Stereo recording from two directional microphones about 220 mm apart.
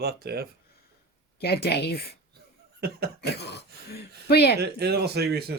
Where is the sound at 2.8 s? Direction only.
45° right (ahead or behind).